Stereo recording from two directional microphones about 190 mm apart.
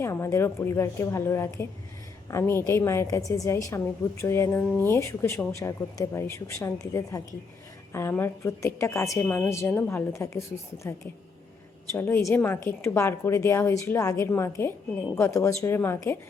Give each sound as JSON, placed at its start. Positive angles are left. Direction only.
{"t": 0.0, "sound": "a woman's voice", "side_deg": 15}